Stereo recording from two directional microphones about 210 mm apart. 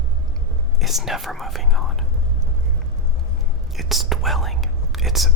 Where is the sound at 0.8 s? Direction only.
Centre (ahead or behind).